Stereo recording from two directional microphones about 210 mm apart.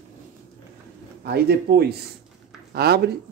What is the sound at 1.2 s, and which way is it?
A woman's voice, 50° right (ahead or behind).